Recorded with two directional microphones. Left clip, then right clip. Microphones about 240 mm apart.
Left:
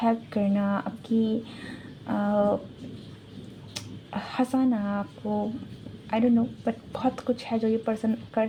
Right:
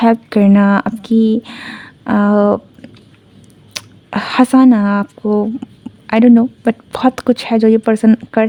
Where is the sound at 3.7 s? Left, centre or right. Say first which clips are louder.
Right 14 dB; right.